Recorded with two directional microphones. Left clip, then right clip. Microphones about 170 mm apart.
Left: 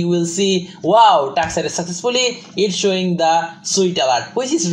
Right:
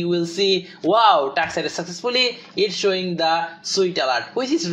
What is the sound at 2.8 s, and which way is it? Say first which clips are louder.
Speech: left 6 dB; 25° right (ahead or behind).